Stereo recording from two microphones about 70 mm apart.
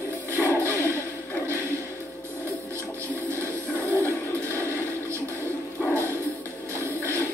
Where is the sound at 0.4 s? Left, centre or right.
Right.